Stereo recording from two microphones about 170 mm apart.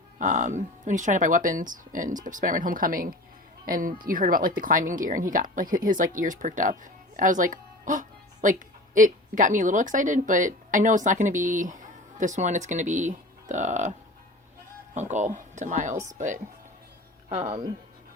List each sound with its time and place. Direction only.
0.2 s speech: 45° right (ahead or behind)
14.9 s speech: 45° right (ahead or behind)